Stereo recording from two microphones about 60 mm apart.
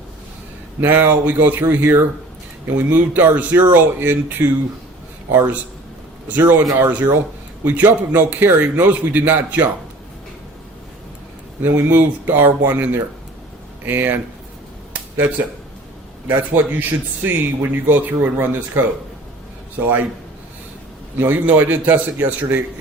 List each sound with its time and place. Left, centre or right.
0.8 s a man's voice: right
11.6 s a man's voice: right
16.3 s a man's voice: right
21.2 s a man's voice: right